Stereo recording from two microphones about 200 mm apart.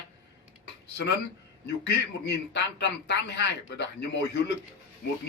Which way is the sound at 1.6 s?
55° left (ahead or behind).